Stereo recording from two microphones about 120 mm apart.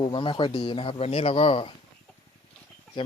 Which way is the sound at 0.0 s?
45° left (ahead or behind).